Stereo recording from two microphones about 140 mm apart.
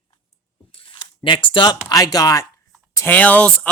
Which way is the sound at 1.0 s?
35° left (ahead or behind).